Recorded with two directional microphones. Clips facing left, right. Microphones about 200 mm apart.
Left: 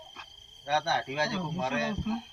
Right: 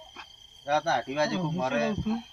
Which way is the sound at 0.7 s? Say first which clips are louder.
Right 3 dB; 5° left (ahead or behind).